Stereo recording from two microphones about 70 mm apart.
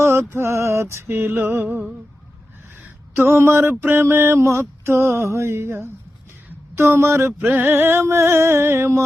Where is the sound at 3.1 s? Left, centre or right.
Right.